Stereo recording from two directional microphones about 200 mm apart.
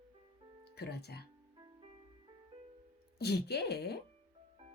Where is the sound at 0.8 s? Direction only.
55° left (ahead or behind).